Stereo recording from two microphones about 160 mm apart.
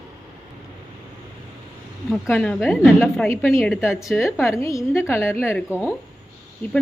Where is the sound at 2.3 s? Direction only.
10° left (ahead or behind).